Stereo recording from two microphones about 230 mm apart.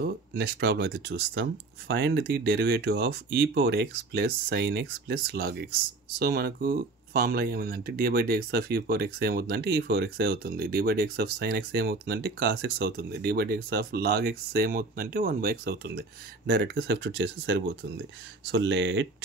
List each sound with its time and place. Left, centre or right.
0.0 s speech: right